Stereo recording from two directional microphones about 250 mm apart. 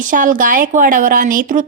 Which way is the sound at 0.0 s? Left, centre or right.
Right.